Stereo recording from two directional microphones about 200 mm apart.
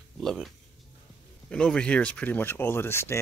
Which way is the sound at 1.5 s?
5° left (ahead or behind).